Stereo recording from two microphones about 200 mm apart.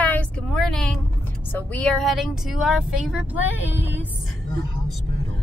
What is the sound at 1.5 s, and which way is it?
Speech, 10° left (ahead or behind).